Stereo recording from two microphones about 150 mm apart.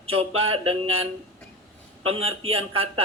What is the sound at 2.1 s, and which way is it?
Speech, 40° right (ahead or behind).